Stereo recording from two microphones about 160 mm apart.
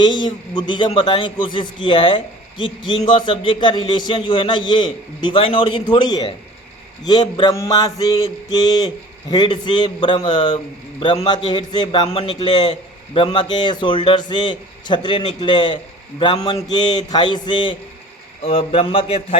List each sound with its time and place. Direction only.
0.0 s a man's voice: 30° left (ahead or behind)